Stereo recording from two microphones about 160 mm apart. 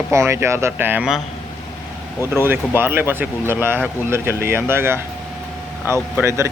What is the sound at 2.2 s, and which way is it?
Speech, 15° right (ahead or behind).